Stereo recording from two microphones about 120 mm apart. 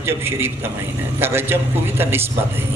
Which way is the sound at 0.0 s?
20° right (ahead or behind).